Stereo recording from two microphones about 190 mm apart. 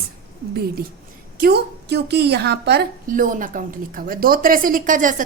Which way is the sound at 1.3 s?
55° right (ahead or behind).